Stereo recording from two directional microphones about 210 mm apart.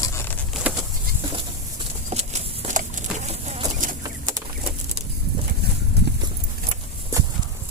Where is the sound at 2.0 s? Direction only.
30° right (ahead or behind).